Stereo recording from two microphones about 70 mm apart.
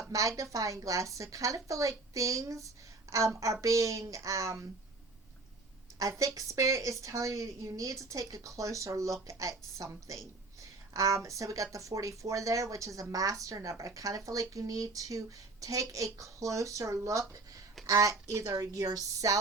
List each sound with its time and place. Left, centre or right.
0.1 s a woman's voice: right
6.0 s a woman's voice: right
18.5 s a woman's voice: right